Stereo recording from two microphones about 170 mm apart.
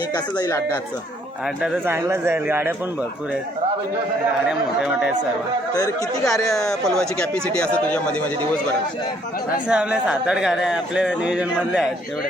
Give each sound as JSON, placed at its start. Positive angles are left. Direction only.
{"t": 0.1, "sound": "speech", "side_deg": 25}
{"t": 1.6, "sound": "speech", "side_deg": -10}
{"t": 4.4, "sound": "speech", "side_deg": -5}
{"t": 6.2, "sound": "speech", "side_deg": 0}
{"t": 9.6, "sound": "speech", "side_deg": -5}